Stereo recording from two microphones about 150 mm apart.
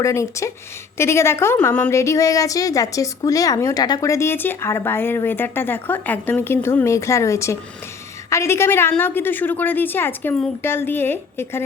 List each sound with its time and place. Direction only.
0.0 s a woman's voice: 20° left (ahead or behind)